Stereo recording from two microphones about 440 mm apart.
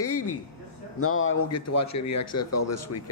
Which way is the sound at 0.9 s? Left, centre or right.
Left.